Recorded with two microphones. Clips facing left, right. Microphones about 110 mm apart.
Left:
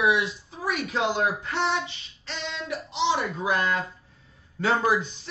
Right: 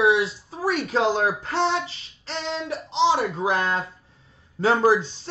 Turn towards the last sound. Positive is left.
turn(degrees=-30)  # may be behind; listen again after turning